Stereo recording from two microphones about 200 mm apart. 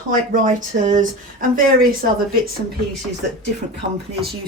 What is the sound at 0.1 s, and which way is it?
Speech, 40° right (ahead or behind).